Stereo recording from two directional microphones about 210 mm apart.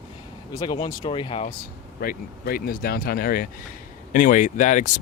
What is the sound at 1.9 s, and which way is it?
Speech, 45° left (ahead or behind).